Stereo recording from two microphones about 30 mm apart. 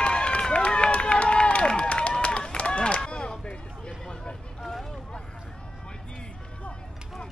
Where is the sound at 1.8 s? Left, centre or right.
Left.